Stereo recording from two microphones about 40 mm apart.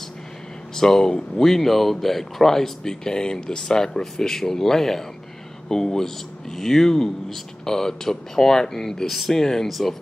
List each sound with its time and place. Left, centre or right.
0.7 s speech: centre
1.4 s speech: centre
9.0 s speech: centre
9.4 s speech: centre
9.7 s speech: centre